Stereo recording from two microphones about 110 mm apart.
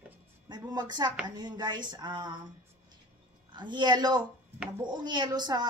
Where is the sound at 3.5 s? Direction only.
45° right (ahead or behind).